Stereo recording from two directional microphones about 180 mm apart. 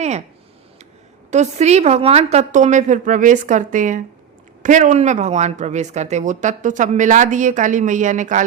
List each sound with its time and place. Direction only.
1.3 s speech: 40° right (ahead or behind)